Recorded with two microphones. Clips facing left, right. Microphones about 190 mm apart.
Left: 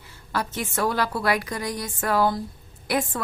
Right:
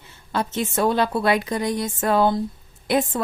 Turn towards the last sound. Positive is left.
turn(degrees=-25)  # may be behind; listen again after turning